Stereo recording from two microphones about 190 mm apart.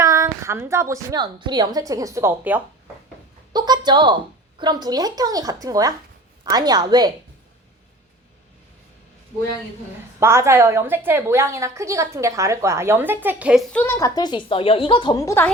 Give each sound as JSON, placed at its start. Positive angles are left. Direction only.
{"t": 0.0, "sound": "a woman's voice", "side_deg": -15}
{"t": 3.5, "sound": "a woman's voice", "side_deg": -20}
{"t": 10.2, "sound": "a woman's voice", "side_deg": -15}
{"t": 13.7, "sound": "a woman's voice", "side_deg": 15}